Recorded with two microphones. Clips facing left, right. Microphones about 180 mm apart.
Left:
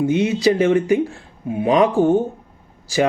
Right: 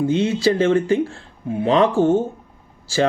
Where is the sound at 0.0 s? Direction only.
15° left (ahead or behind).